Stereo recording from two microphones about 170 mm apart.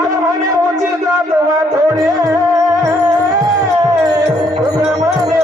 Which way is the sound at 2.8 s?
20° right (ahead or behind).